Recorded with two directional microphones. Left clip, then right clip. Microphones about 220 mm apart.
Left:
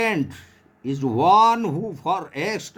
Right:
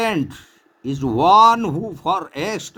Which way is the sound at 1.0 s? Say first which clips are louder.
Right 4 dB; 20° right (ahead or behind).